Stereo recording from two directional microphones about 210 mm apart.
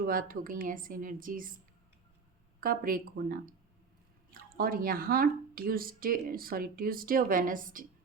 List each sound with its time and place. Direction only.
0.0 s a woman's voice: 40° right (ahead or behind)
2.6 s speech: 45° right (ahead or behind)